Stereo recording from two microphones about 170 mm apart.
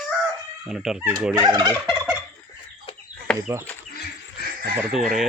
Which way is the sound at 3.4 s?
15° right (ahead or behind).